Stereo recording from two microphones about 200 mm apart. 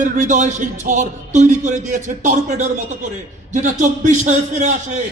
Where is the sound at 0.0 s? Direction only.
40° right (ahead or behind).